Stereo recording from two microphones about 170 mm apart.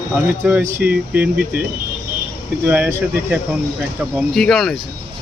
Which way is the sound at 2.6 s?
10° right (ahead or behind).